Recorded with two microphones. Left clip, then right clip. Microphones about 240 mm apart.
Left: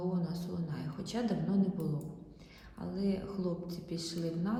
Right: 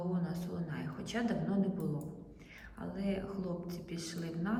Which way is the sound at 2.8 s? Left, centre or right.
Centre.